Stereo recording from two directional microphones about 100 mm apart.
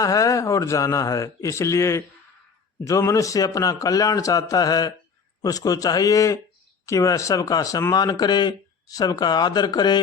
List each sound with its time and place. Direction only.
0.0 s speech: 35° left (ahead or behind)